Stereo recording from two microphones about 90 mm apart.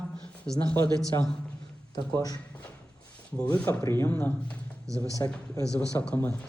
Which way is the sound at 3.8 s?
30° left (ahead or behind).